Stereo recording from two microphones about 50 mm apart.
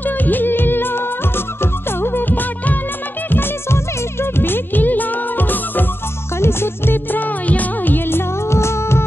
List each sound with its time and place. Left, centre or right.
0.0 s music: left
3.3 s music: left
6.3 s music: left